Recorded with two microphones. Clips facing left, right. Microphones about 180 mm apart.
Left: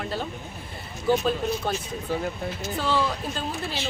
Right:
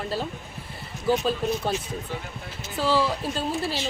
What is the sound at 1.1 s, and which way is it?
Speech, centre (ahead or behind).